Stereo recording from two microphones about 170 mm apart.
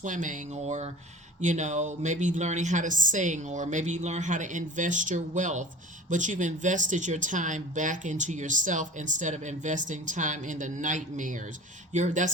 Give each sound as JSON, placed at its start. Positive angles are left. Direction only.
{"t": 0.0, "sound": "speech", "side_deg": -50}